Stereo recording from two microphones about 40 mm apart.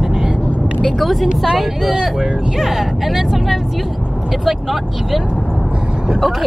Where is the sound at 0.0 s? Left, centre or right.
Centre.